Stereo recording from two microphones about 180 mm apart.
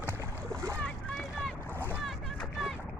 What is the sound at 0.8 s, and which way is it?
Boat, 5° left (ahead or behind).